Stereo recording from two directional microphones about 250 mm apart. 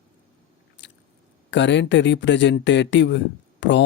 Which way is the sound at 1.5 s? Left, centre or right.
Left.